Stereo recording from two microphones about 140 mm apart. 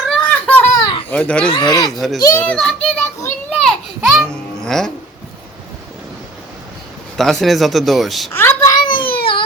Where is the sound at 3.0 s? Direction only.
20° left (ahead or behind).